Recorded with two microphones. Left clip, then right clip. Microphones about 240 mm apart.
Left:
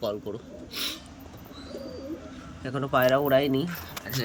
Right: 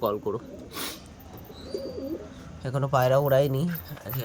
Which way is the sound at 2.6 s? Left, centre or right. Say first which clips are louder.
Left 1 dB; right.